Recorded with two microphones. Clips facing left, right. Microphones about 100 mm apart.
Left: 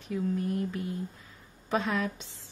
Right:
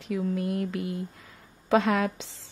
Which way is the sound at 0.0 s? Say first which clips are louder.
Right 2 dB; 90° right.